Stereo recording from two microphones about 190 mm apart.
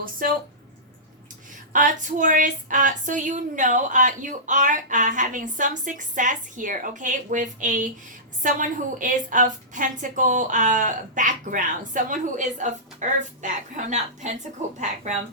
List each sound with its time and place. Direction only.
0.2 s speech: 50° right (ahead or behind)
1.7 s a woman's voice: 45° right (ahead or behind)